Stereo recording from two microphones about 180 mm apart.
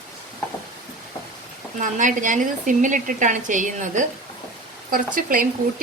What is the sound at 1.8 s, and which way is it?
A woman's voice, 45° right (ahead or behind).